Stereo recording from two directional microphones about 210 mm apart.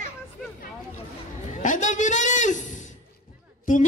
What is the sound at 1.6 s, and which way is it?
A man's voice, 35° left (ahead or behind).